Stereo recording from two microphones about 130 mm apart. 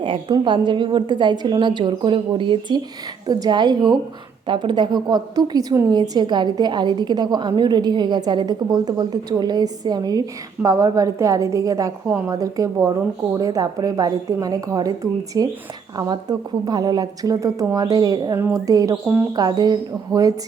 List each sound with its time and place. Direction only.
0.0 s a woman's voice: 40° right (ahead or behind)
16.6 s a woman's voice: 30° right (ahead or behind)